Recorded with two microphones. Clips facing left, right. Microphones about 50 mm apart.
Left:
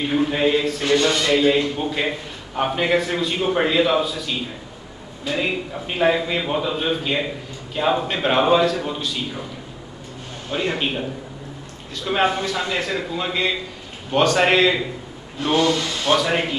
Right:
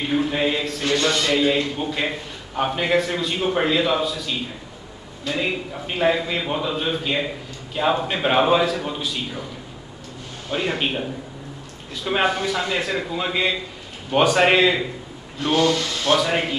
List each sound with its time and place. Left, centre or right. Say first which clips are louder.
0.1 s a man's voice: left 2 dB; centre
5.2 s a man's voice: left 1 dB; centre
10.5 s a man's voice: even; centre
15.5 s speech: even; left
16.2 s a man's voice: even; centre